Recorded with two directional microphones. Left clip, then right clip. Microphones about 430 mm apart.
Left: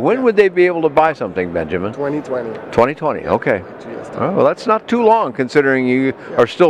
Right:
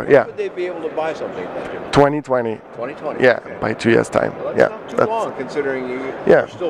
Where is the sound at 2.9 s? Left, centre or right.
Left.